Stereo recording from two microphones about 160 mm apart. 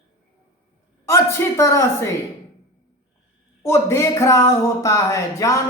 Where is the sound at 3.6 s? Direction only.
15° left (ahead or behind).